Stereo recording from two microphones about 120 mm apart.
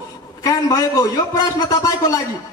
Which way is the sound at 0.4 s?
30° left (ahead or behind).